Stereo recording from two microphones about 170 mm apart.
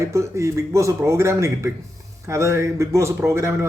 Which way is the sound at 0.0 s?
15° right (ahead or behind).